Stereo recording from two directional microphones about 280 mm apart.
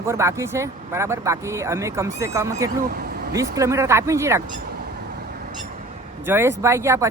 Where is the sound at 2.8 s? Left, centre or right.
Right.